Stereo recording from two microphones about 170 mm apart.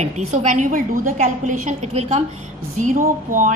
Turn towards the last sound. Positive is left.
turn(degrees=-50)  # may be behind; listen again after turning